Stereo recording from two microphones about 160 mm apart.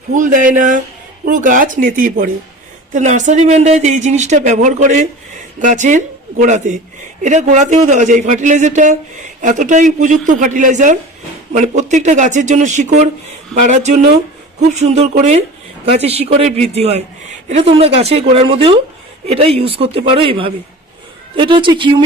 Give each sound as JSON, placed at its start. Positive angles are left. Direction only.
{"t": 0.1, "sound": "speech", "side_deg": -50}
{"t": 2.9, "sound": "a woman's voice", "side_deg": -50}